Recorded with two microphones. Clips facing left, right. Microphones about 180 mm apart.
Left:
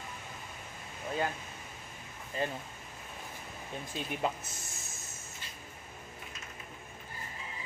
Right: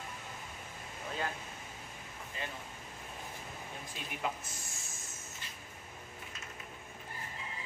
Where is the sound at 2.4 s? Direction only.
40° left (ahead or behind).